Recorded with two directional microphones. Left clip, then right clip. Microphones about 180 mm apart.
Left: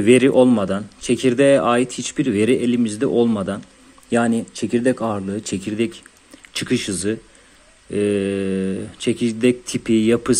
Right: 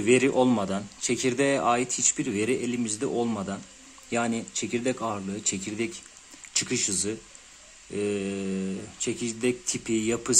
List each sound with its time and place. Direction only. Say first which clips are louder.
0.0 s speech: left 9 dB; 15° left (ahead or behind)